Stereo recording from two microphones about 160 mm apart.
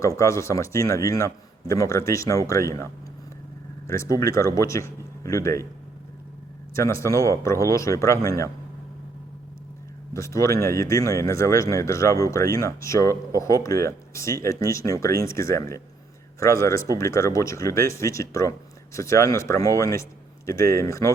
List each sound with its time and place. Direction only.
0.2 s speech: 20° left (ahead or behind)
3.8 s speech: 20° left (ahead or behind)
6.7 s speech: 20° left (ahead or behind)
10.2 s speech: 20° left (ahead or behind)